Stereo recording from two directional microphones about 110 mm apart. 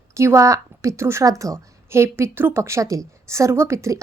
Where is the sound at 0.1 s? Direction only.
25° right (ahead or behind).